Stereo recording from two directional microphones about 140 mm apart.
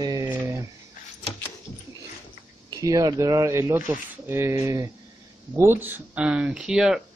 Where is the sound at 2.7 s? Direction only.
25° right (ahead or behind); by 7.0 s 5° right (ahead or behind).